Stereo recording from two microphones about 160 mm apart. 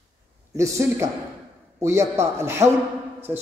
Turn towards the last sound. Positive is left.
turn(degrees=-15)  # may be behind; listen again after turning